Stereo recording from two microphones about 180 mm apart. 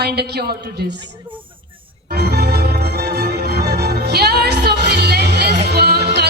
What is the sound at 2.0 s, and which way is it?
Music, 65° right (ahead or behind).